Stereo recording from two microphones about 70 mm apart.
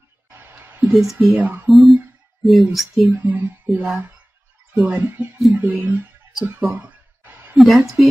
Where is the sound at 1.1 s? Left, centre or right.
Right.